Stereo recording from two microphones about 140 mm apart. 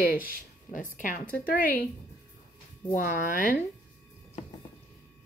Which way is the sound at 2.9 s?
75° left (ahead or behind).